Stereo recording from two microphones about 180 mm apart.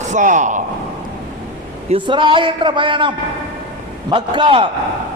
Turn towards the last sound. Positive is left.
turn(degrees=-25)  # may be behind; listen again after turning